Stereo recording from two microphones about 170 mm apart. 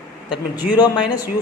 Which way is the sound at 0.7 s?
25° left (ahead or behind).